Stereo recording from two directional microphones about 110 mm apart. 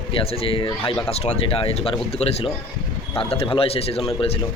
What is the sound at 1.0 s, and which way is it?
Speech, 70° left (ahead or behind).